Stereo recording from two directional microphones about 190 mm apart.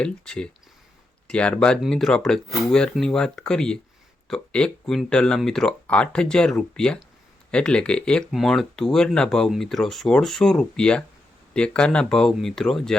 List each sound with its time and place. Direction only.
0.0 s speech: 5° left (ahead or behind)